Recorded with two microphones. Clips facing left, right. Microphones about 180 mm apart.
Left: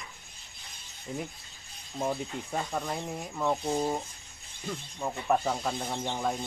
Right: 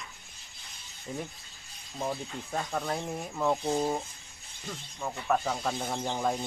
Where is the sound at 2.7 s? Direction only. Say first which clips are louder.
Right 1 dB; centre (ahead or behind).